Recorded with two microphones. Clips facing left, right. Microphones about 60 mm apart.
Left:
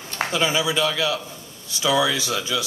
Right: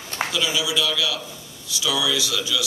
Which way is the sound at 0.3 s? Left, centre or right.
Left.